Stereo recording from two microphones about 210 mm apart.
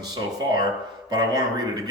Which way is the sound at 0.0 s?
20° right (ahead or behind).